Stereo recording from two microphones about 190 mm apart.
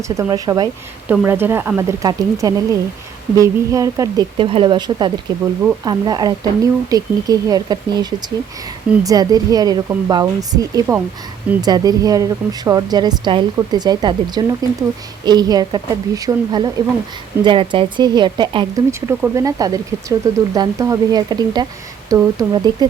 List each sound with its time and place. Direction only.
0.1 s speech: 15° right (ahead or behind)
9.0 s speech: 20° right (ahead or behind)
18.9 s speech: 15° right (ahead or behind)